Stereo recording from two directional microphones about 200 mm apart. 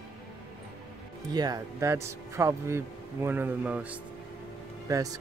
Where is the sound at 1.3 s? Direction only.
20° right (ahead or behind).